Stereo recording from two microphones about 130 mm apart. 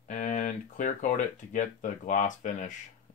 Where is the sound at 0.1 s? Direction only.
70° left (ahead or behind).